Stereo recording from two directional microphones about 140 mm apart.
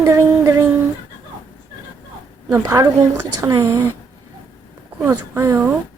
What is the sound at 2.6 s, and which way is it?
A woman's voice, 30° right (ahead or behind).